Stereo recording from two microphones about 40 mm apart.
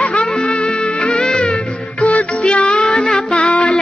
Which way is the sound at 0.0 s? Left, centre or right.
Left.